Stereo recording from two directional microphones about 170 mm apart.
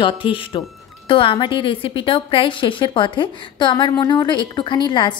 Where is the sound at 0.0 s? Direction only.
30° left (ahead or behind).